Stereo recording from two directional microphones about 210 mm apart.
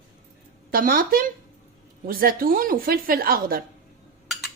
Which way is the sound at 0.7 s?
45° right (ahead or behind).